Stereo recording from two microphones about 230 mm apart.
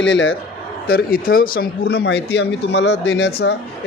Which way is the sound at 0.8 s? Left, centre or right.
Left.